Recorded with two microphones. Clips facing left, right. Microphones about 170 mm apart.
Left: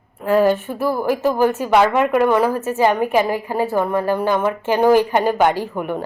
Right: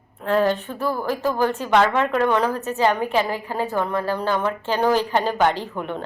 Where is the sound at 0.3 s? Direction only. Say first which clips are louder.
Left 4 dB; 10° left (ahead or behind).